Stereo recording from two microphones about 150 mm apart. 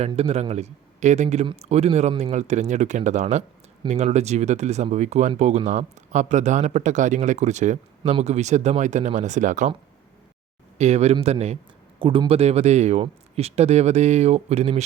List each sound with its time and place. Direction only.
0.2 s speech: 40° right (ahead or behind)
10.8 s speech: 45° right (ahead or behind)
11.9 s speech: 35° right (ahead or behind)